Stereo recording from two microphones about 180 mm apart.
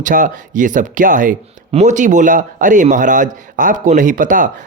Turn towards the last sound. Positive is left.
turn(degrees=-45)  # may be behind; listen again after turning